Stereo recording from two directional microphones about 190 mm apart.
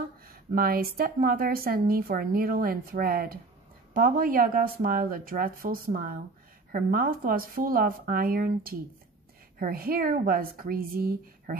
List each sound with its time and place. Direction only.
0.3 s speech: 50° right (ahead or behind)